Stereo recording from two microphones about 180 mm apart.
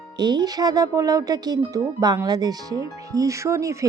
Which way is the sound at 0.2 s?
25° right (ahead or behind).